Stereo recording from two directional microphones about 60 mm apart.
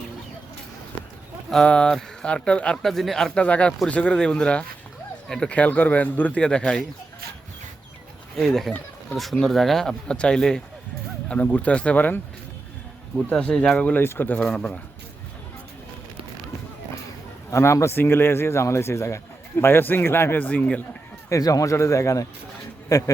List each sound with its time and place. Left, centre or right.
1.6 s speech: centre
2.7 s speech: centre
3.3 s speech: centre
6.4 s speech: centre
8.4 s speech: centre
10.1 s speech: centre
11.5 s speech: left
13.4 s speech: centre
13.9 s speech: left
14.3 s speech: centre
17.5 s speech: left
20.4 s speech: left
21.2 s a man's voice: left